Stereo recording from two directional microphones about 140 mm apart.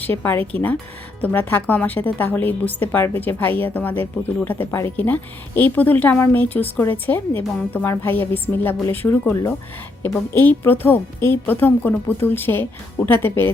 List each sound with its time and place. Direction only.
0.0 s a woman's voice: 15° left (ahead or behind)